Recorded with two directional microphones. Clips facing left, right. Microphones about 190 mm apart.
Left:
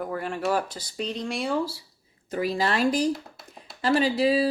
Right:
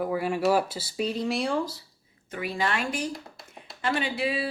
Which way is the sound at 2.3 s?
35° left (ahead or behind).